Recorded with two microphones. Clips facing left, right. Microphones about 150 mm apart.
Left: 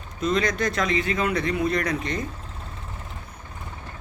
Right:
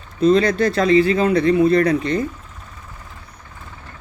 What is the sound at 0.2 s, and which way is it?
Speech, 30° right (ahead or behind).